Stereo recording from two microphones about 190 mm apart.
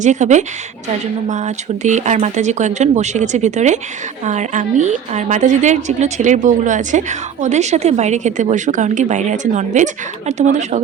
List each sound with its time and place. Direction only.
0.0 s a woman's voice: 40° right (ahead or behind)